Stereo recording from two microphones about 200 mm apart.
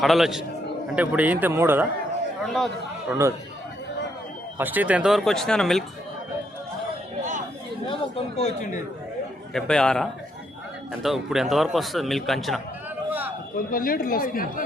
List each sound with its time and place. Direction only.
0.0 s a man's voice: centre (ahead or behind)
3.1 s a man's voice: 15° right (ahead or behind)
4.5 s a man's voice: 10° right (ahead or behind)
7.9 s speech: 30° left (ahead or behind)
9.5 s a man's voice: 5° left (ahead or behind)
13.1 s a sound: 10° right (ahead or behind)
13.7 s speech: 45° left (ahead or behind)